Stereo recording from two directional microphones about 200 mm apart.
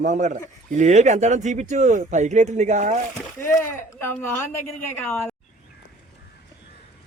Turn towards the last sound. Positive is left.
turn(degrees=10)  # may be behind; listen again after turning